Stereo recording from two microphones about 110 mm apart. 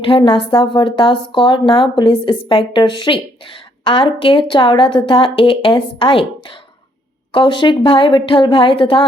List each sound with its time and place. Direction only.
0.2 s a woman's voice: 50° left (ahead or behind)